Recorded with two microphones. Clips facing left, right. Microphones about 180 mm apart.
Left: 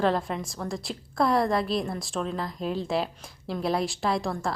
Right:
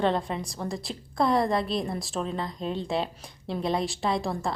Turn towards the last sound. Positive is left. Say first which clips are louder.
# even
turn(degrees=0)  # may be behind; listen again after turning